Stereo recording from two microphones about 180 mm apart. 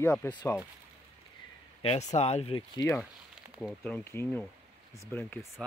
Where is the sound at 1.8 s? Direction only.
35° left (ahead or behind).